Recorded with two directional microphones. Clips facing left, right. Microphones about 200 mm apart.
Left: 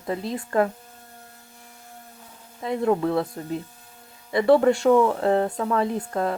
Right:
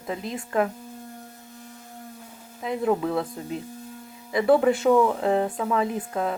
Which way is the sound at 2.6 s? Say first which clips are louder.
Left 2 dB; centre (ahead or behind).